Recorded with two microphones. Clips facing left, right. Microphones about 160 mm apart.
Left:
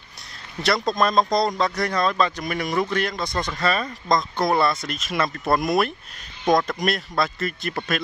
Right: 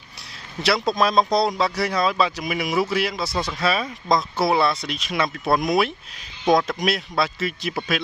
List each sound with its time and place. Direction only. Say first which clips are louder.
0.6 s speech: right 1 dB; 5° right (ahead or behind)